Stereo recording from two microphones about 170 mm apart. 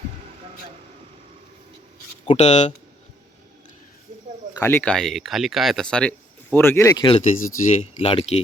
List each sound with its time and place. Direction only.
2.2 s speech: 40° left (ahead or behind)
4.6 s speech: 10° left (ahead or behind)
7.2 s speech: 45° left (ahead or behind)